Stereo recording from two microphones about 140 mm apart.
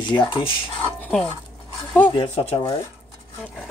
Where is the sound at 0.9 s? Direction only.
10° left (ahead or behind).